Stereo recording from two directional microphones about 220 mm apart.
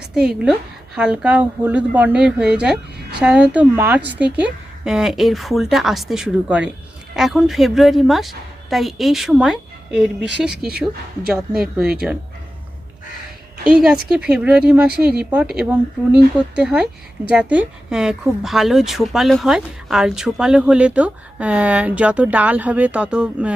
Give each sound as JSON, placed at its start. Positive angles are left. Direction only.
{"t": 0.1, "sound": "a woman's voice", "side_deg": 0}
{"t": 13.7, "sound": "a woman's voice", "side_deg": -5}